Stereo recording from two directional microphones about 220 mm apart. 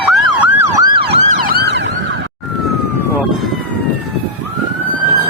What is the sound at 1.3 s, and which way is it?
Emergency vehicle, 45° right (ahead or behind).